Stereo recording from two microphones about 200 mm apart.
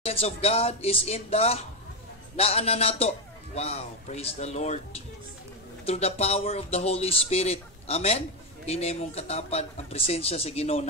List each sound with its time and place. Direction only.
0.0 s speech: 30° left (ahead or behind)